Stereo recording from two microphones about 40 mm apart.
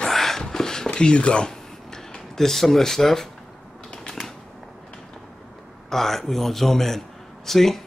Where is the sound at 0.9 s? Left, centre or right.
Left.